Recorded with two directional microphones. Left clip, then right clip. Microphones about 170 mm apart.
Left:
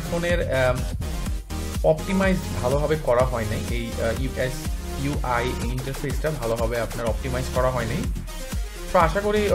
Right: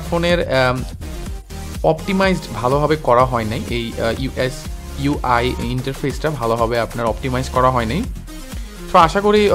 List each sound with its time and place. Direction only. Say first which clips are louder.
0.2 s speech: right 6 dB; 40° right (ahead or behind)
1.8 s speech: right 5 dB; 40° right (ahead or behind)